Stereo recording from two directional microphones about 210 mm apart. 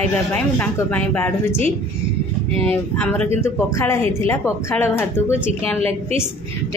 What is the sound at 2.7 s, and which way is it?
Speech, 10° left (ahead or behind).